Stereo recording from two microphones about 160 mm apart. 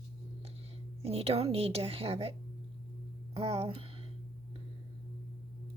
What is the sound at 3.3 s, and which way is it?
Speech, 35° right (ahead or behind).